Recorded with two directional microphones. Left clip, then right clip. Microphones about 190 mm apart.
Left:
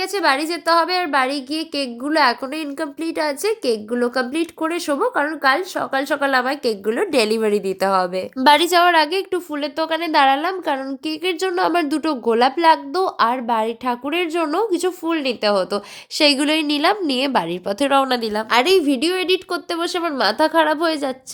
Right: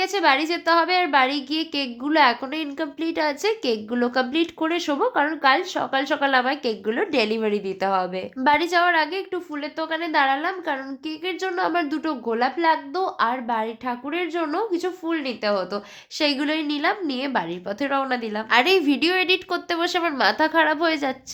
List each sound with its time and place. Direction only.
0.0 s speech: 10° left (ahead or behind)
8.4 s a woman's voice: 30° left (ahead or behind)
18.6 s speech: 15° left (ahead or behind)